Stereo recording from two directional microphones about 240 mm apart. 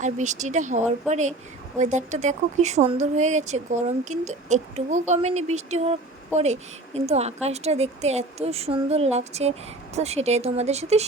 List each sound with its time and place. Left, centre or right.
0.0 s speech: right